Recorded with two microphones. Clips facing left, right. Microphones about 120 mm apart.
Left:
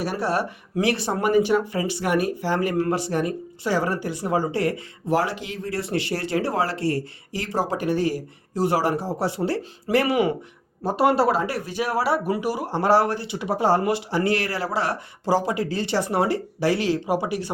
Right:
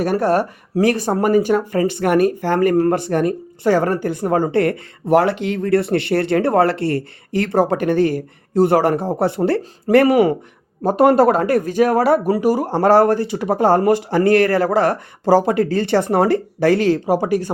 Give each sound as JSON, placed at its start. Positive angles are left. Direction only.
{"t": 0.0, "sound": "speech", "side_deg": -50}